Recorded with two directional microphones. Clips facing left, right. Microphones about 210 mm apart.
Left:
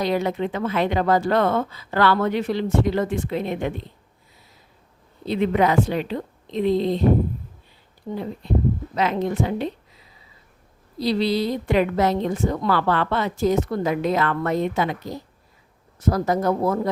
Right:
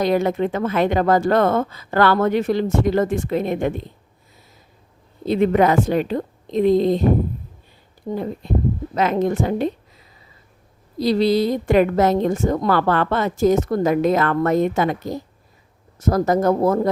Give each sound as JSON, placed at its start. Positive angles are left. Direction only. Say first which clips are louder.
{"t": 0.0, "sound": "a woman's voice", "louder": "right 4 dB", "side_deg": -50}
{"t": 5.2, "sound": "a woman's voice", "louder": "right 4 dB", "side_deg": -45}
{"t": 8.1, "sound": "a woman's voice", "louder": "right 2 dB", "side_deg": -45}
{"t": 10.9, "sound": "a woman's voice", "louder": "right 4 dB", "side_deg": -45}